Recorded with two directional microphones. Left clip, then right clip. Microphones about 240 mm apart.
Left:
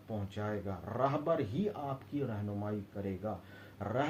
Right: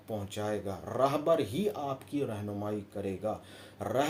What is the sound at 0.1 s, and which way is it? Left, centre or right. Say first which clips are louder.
Speech: right 5 dB; right.